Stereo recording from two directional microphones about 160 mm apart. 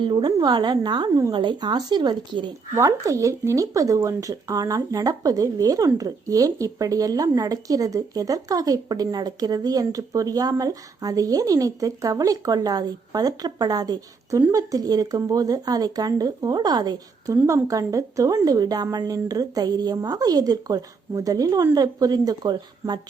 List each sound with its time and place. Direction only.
0.0 s speech: 30° right (ahead or behind)
2.7 s speech: 20° right (ahead or behind)